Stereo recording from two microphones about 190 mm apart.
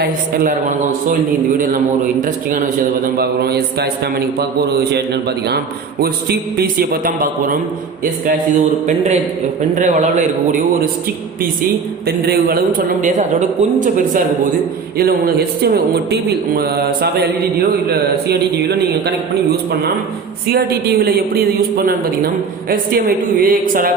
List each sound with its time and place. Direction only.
0.0 s a man's voice: 50° right (ahead or behind)
9.7 s a man's voice: 40° right (ahead or behind)
12.0 s a man's voice: 55° right (ahead or behind)
14.9 s a man's voice: 55° right (ahead or behind)
22.7 s a man's voice: 50° right (ahead or behind)